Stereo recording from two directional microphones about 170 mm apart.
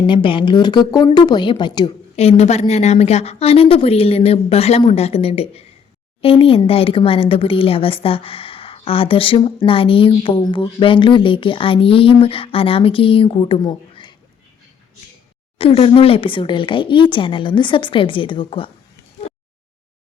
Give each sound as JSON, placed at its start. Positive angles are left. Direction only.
{"t": 0.1, "sound": "speech", "side_deg": 30}
{"t": 2.1, "sound": "speech", "side_deg": 40}
{"t": 15.5, "sound": "speech", "side_deg": 35}